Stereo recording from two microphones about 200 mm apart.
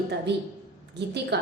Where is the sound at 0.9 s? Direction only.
55° right (ahead or behind).